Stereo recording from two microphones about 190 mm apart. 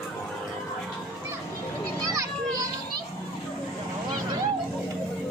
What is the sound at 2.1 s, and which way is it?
Children playing, 15° right (ahead or behind).